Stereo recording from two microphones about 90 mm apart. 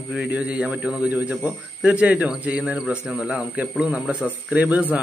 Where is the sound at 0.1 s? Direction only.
15° right (ahead or behind).